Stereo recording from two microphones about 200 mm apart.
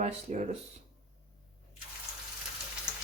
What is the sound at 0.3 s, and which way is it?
Speech, 35° right (ahead or behind).